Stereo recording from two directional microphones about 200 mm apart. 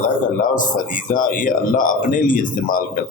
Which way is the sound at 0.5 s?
40° left (ahead or behind).